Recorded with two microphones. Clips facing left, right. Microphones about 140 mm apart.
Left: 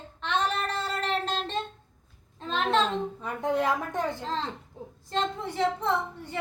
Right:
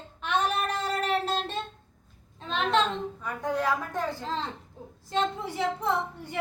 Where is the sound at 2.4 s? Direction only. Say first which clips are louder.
Even; centre (ahead or behind).